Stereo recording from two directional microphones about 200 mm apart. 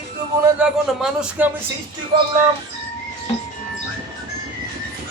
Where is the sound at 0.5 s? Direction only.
5° right (ahead or behind).